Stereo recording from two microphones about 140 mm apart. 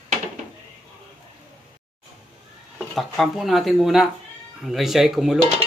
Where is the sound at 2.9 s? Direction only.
Centre (ahead or behind).